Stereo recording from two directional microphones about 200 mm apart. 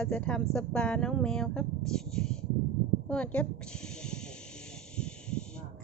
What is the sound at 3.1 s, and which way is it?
Snake, 5° left (ahead or behind).